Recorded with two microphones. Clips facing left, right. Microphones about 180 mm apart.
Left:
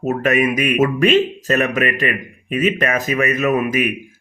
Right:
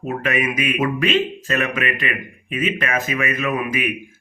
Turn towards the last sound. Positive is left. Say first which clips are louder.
# left 5 dB
turn(degrees=40)  # may be behind; listen again after turning